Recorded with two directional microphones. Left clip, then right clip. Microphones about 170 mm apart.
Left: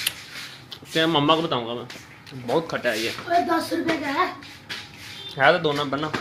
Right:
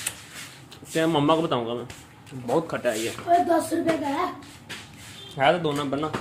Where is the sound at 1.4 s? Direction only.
25° right (ahead or behind).